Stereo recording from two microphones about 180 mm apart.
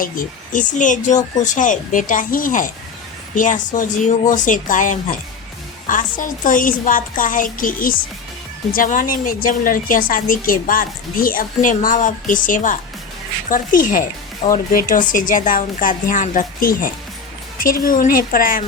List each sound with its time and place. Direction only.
0.0 s a woman's voice: 50° left (ahead or behind)